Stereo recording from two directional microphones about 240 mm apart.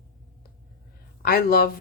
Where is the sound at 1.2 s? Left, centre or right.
Left.